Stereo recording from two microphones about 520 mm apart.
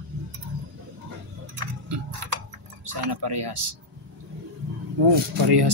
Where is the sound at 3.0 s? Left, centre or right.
Right.